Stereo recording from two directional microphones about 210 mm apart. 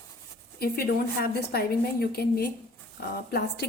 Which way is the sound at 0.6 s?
45° left (ahead or behind).